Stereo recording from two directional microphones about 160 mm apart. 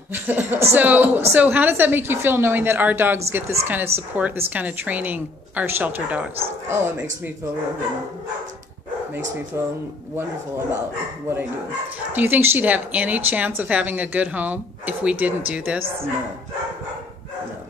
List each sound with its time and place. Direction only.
0.1 s a woman's voice: 10° right (ahead or behind)
9.5 s a woman's voice: 15° right (ahead or behind)
12.1 s a woman's voice: 10° right (ahead or behind)